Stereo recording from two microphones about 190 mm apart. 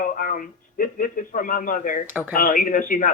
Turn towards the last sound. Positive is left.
turn(degrees=45)  # may be behind; listen again after turning